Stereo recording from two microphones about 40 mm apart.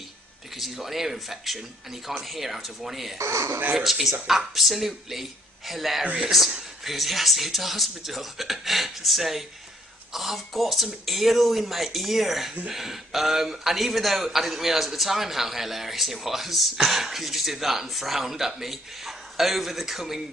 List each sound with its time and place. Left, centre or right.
0.6 s speech: centre